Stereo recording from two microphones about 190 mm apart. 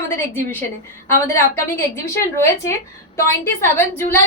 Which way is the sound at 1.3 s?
15° left (ahead or behind).